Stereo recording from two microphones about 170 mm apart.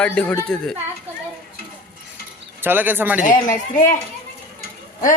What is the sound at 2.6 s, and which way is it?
Speech, 10° right (ahead or behind).